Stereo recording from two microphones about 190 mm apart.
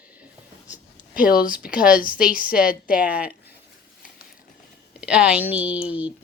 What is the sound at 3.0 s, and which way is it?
Speech, 5° right (ahead or behind).